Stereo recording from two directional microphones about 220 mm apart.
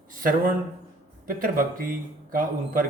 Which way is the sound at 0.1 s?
40° right (ahead or behind).